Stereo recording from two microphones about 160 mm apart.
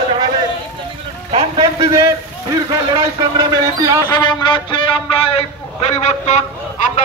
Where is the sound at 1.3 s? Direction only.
30° right (ahead or behind).